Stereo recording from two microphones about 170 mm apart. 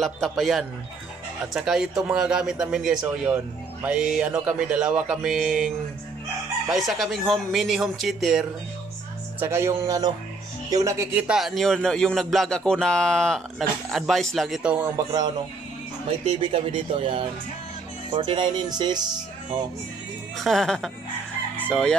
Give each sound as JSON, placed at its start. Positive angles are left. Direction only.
{"t": 0.0, "sound": "speech", "side_deg": 0}
{"t": 6.7, "sound": "speech", "side_deg": 0}
{"t": 9.4, "sound": "speech", "side_deg": -15}
{"t": 11.3, "sound": "speech", "side_deg": 0}
{"t": 14.8, "sound": "speech", "side_deg": -20}
{"t": 16.1, "sound": "speech", "side_deg": -35}
{"t": 20.3, "sound": "speech", "side_deg": 0}
{"t": 21.5, "sound": "fowl", "side_deg": 5}